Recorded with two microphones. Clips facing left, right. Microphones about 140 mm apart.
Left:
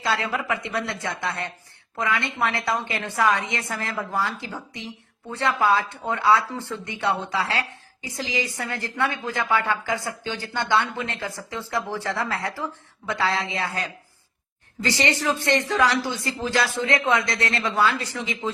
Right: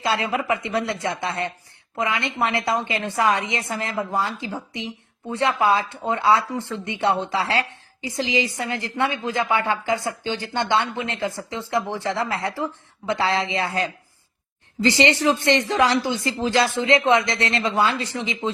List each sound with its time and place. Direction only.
0.0 s a woman's voice: 20° right (ahead or behind)
14.8 s a woman's voice: 20° right (ahead or behind)